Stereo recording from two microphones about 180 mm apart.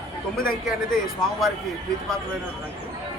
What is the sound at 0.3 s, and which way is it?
Speech, 5° left (ahead or behind).